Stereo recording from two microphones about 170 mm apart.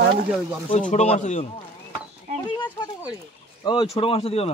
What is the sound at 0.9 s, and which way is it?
Speech, 40° left (ahead or behind).